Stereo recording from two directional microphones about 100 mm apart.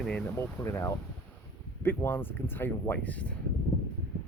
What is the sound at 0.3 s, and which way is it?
Speech, 25° left (ahead or behind).